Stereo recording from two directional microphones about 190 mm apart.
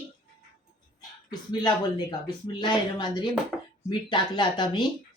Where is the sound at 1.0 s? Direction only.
20° left (ahead or behind).